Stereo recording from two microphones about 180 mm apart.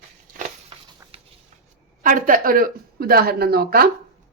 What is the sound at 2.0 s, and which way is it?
Speech, 50° right (ahead or behind).